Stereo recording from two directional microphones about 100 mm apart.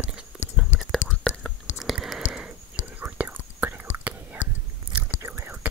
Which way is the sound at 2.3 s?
10° right (ahead or behind).